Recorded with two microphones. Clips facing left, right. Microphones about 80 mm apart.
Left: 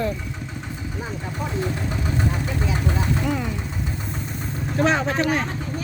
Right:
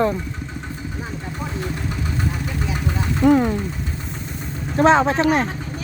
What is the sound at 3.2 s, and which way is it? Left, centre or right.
Speech, right.